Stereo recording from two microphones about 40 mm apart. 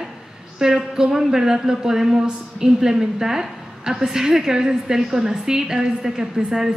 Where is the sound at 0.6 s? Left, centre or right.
Centre.